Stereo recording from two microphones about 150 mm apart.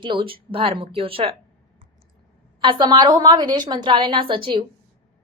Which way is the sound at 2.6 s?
30° right (ahead or behind).